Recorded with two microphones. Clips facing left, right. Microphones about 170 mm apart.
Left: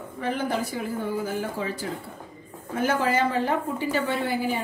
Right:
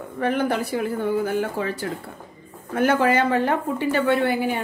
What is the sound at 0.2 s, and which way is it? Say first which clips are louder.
A woman's voice: right 5 dB; 65° right (ahead or behind).